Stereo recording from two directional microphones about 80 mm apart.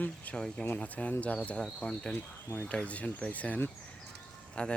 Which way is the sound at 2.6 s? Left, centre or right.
Centre.